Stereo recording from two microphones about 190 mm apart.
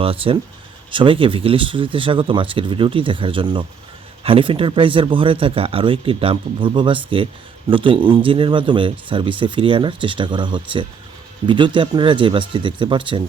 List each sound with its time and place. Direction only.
0.0 s speech: 30° right (ahead or behind)